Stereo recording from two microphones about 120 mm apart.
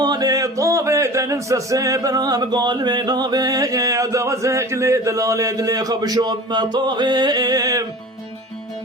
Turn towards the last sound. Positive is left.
turn(degrees=-30)  # may be behind; listen again after turning